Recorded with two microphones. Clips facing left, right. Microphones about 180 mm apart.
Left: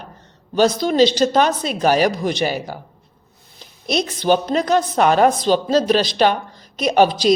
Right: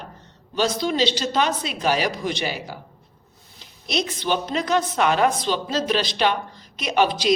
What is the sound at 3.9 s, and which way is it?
Speech, 40° left (ahead or behind).